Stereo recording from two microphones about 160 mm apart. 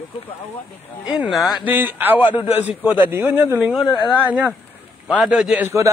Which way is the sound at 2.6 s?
10° right (ahead or behind).